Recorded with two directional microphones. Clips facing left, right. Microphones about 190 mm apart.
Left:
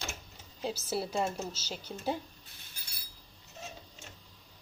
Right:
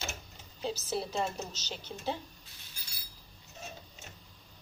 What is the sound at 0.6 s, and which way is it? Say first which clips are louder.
A woman's voice: even; 10° left (ahead or behind).